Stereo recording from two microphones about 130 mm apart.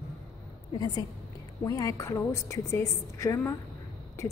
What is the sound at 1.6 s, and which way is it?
A woman's voice, 25° left (ahead or behind).